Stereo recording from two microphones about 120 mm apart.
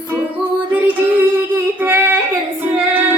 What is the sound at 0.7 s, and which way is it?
Music, 15° right (ahead or behind).